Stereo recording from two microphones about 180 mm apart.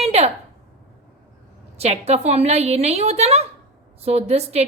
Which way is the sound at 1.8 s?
35° right (ahead or behind).